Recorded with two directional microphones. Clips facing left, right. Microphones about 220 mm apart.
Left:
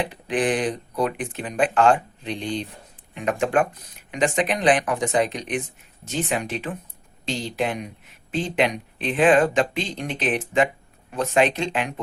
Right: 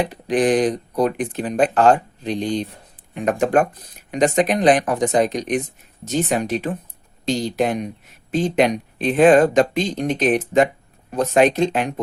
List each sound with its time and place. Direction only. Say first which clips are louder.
0.0 s speech: right 5 dB; 40° right (ahead or behind)